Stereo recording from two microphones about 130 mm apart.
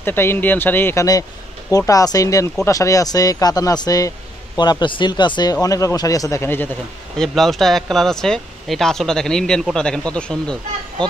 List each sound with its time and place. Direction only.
0.0 s speech: 15° left (ahead or behind)
1.7 s speech: 25° left (ahead or behind)
7.2 s speech: centre (ahead or behind)